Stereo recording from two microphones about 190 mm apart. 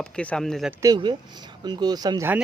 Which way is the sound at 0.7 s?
20° right (ahead or behind).